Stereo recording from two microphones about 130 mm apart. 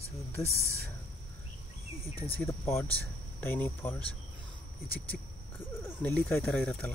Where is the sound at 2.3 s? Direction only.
20° left (ahead or behind).